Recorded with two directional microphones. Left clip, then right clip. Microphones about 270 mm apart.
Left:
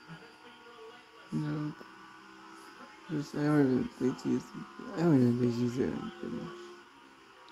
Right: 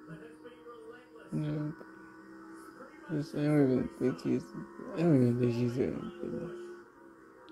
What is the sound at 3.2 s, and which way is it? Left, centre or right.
Speech, centre.